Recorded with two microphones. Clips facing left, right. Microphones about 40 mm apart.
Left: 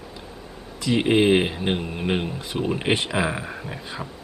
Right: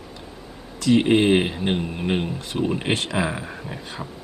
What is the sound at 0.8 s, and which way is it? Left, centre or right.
Speech, centre.